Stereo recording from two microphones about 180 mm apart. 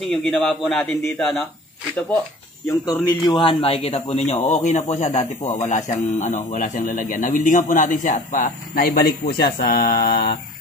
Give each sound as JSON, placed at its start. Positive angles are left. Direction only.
{"t": 0.0, "sound": "a man's voice", "side_deg": 0}
{"t": 2.7, "sound": "a man's voice", "side_deg": 20}